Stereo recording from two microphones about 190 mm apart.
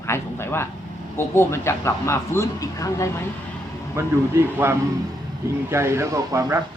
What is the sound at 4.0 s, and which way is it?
A man's voice, 15° right (ahead or behind).